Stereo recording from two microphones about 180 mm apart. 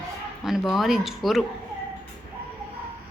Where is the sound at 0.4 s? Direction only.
Centre (ahead or behind).